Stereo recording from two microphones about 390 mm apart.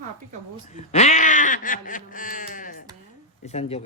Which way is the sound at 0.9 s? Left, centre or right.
Centre.